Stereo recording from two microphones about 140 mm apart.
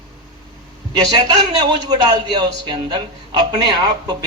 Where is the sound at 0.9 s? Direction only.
30° right (ahead or behind).